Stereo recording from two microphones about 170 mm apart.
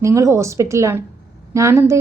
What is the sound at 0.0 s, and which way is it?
A woman's voice, 15° right (ahead or behind).